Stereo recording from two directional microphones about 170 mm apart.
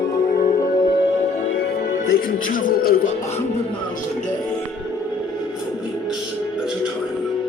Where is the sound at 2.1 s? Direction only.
60° left (ahead or behind).